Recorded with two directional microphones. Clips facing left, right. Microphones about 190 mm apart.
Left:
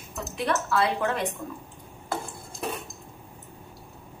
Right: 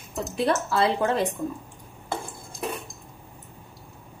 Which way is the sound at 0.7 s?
30° right (ahead or behind).